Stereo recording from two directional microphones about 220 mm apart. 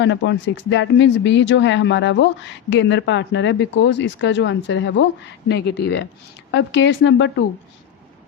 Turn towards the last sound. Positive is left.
turn(degrees=55)  # may be behind; listen again after turning